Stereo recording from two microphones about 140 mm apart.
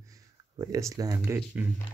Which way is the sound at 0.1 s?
25° right (ahead or behind).